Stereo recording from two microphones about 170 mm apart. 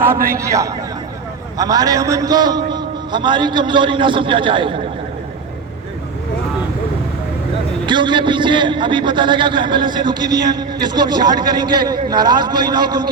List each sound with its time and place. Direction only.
0.3 s a man's voice: 20° right (ahead or behind)
7.9 s a man's voice: 30° right (ahead or behind)